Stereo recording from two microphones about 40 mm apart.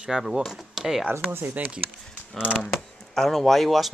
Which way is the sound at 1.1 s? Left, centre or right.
Right.